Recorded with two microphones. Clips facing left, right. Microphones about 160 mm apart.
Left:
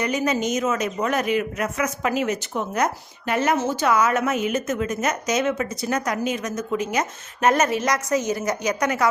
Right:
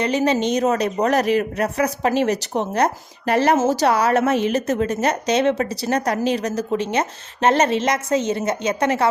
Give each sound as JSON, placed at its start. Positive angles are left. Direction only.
{"t": 0.0, "sound": "a woman's voice", "side_deg": -30}